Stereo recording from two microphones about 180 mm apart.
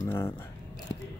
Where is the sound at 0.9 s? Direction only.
35° left (ahead or behind).